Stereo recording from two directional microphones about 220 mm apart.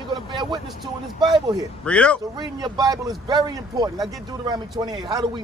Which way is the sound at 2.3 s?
15° right (ahead or behind).